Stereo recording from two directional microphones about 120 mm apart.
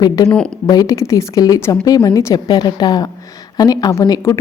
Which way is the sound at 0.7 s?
30° left (ahead or behind).